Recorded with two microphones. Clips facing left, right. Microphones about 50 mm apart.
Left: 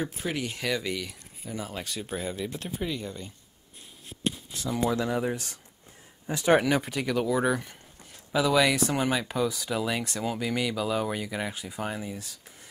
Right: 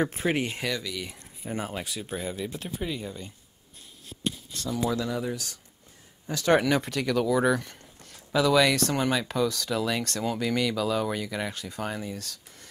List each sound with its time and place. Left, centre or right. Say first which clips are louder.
0.2 s speech: right 4 dB; right
1.7 s speech: right 2 dB; centre
2.0 s speech: left 2 dB; centre
4.6 s speech: left 1 dB; left
6.2 s speech: even; centre